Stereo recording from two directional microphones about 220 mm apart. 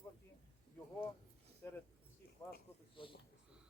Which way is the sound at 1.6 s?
10° left (ahead or behind).